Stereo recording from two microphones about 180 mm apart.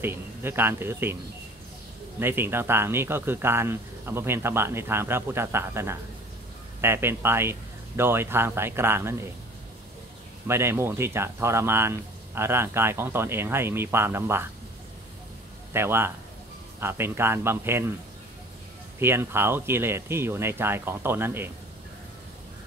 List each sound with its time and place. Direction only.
0.0 s speech: 15° right (ahead or behind)
2.1 s speech: 10° right (ahead or behind)
10.4 s speech: 15° right (ahead or behind)
15.7 s speech: 15° right (ahead or behind)
18.9 s speech: 15° right (ahead or behind)